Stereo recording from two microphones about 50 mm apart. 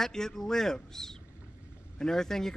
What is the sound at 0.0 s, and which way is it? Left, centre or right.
Speech, centre.